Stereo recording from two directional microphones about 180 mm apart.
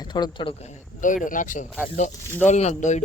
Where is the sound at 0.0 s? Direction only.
25° left (ahead or behind).